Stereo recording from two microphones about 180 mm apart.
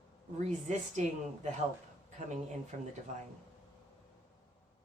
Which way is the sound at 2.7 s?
40° right (ahead or behind).